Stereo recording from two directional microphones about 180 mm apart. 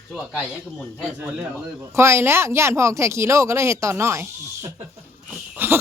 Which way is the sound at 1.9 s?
15° right (ahead or behind).